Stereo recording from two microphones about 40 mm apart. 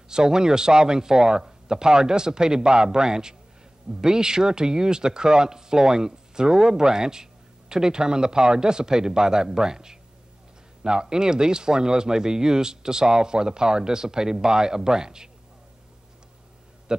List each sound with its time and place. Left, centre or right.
0.1 s speech: centre